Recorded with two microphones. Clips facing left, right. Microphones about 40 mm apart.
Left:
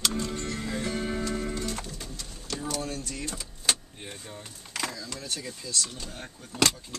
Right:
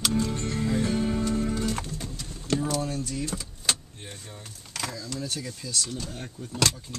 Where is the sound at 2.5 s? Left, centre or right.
Right.